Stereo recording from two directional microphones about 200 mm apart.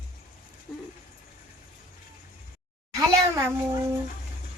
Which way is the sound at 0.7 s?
Centre (ahead or behind).